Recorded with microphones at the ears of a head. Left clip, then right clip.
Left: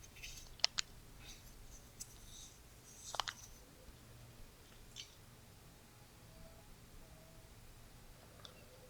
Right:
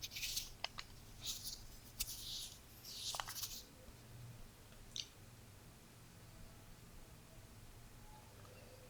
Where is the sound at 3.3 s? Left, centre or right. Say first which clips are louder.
Right 9 dB; right.